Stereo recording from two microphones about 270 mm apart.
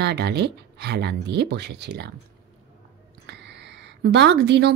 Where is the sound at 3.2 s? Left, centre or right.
Right.